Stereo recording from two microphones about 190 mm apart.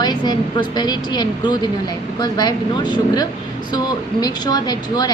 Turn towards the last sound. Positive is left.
turn(degrees=20)  # may be behind; listen again after turning